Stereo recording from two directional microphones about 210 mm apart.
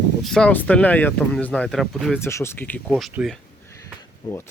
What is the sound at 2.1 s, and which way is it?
Speech, 10° left (ahead or behind).